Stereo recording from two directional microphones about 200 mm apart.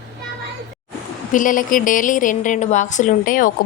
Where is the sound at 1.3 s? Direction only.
40° left (ahead or behind).